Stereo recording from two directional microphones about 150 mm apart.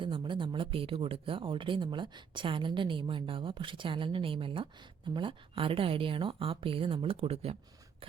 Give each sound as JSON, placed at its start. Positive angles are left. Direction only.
{"t": 0.0, "sound": "speech", "side_deg": -35}